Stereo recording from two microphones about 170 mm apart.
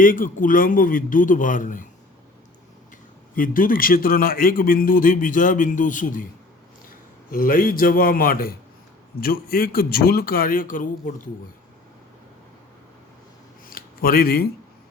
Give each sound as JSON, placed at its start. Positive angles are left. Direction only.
{"t": 0.0, "sound": "speech", "side_deg": 55}
{"t": 3.3, "sound": "a man's voice", "side_deg": 55}
{"t": 7.3, "sound": "a man's voice", "side_deg": 55}
{"t": 13.7, "sound": "a sound", "side_deg": 60}